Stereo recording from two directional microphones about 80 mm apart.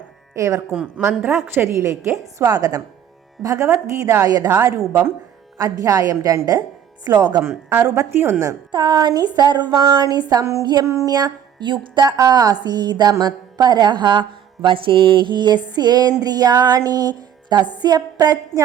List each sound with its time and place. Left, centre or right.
0.3 s a woman's voice: right
0.7 s a woman's voice: centre
1.0 s a woman's voice: right
5.5 s a woman's voice: right
7.2 s music: right
7.4 s speech: right
8.7 s music: right
10.4 s a woman's voice: right
11.1 s music: right
12.6 s music: right